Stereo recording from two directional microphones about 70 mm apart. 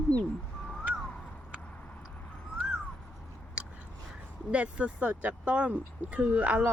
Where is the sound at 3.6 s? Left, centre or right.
Centre.